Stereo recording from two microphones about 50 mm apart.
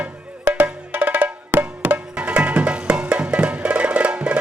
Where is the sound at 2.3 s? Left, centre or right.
Right.